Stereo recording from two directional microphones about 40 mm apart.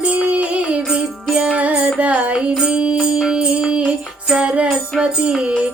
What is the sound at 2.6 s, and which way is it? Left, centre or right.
Music, right.